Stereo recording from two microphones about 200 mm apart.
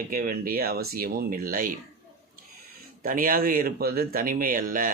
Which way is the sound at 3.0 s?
45° right (ahead or behind).